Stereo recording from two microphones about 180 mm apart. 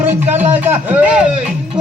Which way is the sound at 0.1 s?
10° right (ahead or behind).